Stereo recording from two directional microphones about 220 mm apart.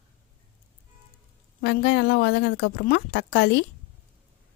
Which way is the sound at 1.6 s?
50° left (ahead or behind).